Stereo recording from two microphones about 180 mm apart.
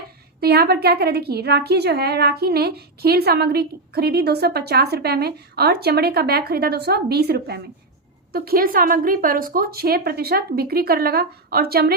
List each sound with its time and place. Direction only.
0.3 s a woman's voice: 60° right (ahead or behind)